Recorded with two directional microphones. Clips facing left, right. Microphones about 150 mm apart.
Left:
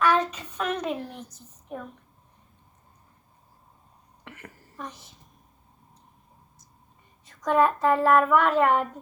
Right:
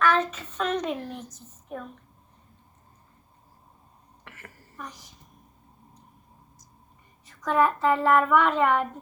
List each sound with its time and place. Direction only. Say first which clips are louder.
0.0 s speech: left 1 dB; 15° left (ahead or behind)
4.2 s a sound: left 4 dB; 15° left (ahead or behind)
7.3 s speech: left 1 dB; 20° left (ahead or behind)